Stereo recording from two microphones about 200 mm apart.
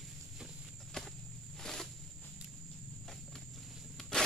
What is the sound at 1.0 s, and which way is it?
Walk, 5° left (ahead or behind).